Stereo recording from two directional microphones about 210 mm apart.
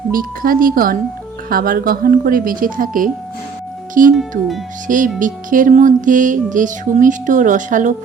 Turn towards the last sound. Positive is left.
turn(degrees=-35)  # may be behind; listen again after turning